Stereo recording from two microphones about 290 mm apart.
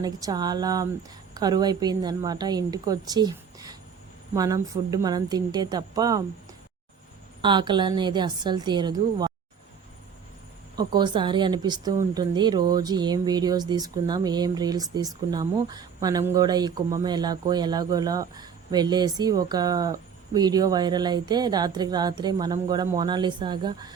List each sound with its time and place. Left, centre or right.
0.0 s speech: centre
7.4 s speech: centre
10.8 s speech: centre